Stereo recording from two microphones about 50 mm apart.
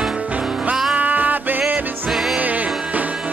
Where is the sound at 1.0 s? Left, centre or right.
Right.